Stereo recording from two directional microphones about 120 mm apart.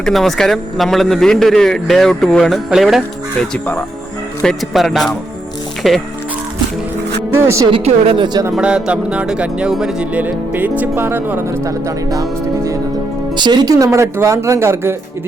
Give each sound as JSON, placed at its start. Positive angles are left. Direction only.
{"t": 0.0, "sound": "a man's voice", "side_deg": 0}
{"t": 3.5, "sound": "speech", "side_deg": 15}
{"t": 4.4, "sound": "a man's voice", "side_deg": 0}
{"t": 7.3, "sound": "speech", "side_deg": -25}
{"t": 7.9, "sound": "speech", "side_deg": -50}
{"t": 8.5, "sound": "speech", "side_deg": -10}
{"t": 13.3, "sound": "speech", "side_deg": -35}